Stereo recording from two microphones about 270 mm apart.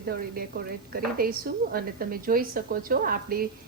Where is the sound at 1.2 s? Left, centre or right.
Right.